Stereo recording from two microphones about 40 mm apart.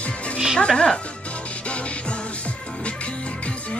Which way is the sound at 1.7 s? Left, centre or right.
Left.